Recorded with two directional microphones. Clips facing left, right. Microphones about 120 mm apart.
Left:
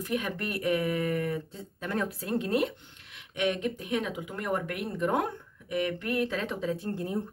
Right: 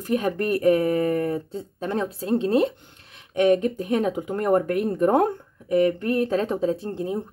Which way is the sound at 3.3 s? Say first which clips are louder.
Right 10 dB; 40° right (ahead or behind).